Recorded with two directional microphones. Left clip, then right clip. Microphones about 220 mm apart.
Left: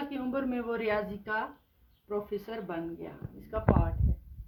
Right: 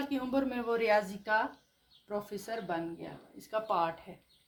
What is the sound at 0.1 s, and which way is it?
Speech, 35° right (ahead or behind).